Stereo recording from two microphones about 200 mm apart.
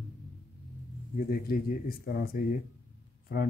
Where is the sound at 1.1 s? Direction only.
50° left (ahead or behind).